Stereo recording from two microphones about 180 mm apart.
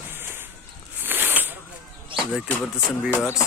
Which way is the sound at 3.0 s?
5° right (ahead or behind).